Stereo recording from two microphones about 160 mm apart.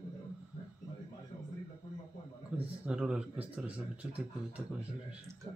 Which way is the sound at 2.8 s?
5° right (ahead or behind).